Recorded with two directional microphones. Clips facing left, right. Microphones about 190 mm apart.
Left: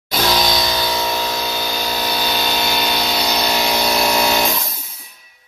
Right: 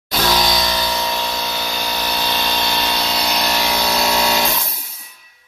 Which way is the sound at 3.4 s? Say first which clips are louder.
Left 2 dB; 20° left (ahead or behind).